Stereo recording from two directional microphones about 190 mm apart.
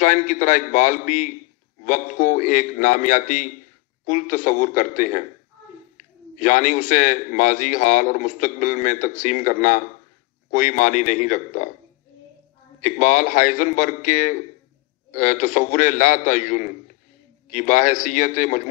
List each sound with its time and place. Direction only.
0.0 s a man's voice: 45° left (ahead or behind)
13.0 s a man's voice: 45° left (ahead or behind)